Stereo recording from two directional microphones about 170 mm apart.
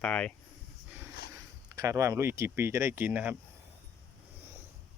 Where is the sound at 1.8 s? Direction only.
15° right (ahead or behind).